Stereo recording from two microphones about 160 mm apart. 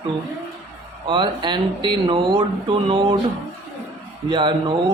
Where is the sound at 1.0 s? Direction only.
30° right (ahead or behind).